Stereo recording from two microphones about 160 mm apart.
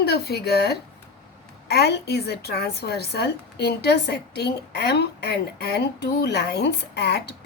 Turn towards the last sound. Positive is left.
turn(degrees=90)